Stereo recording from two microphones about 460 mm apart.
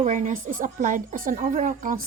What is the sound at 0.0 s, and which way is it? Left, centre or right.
A woman's voice, centre.